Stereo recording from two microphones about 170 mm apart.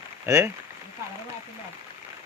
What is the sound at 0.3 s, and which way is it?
Speech, 15° right (ahead or behind).